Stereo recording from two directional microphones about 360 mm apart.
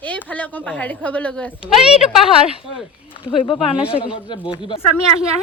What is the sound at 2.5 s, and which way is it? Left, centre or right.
Speech, centre.